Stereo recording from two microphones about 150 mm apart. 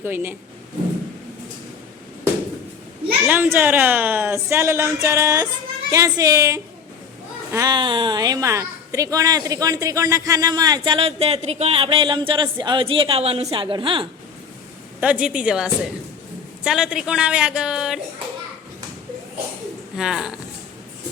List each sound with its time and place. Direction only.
0.0 s speech: 15° right (ahead or behind)
3.2 s a child's voice: 10° right (ahead or behind); by 14.1 s 35° right (ahead or behind)
15.0 s speech: 5° right (ahead or behind)
20.0 s speech: 5° right (ahead or behind)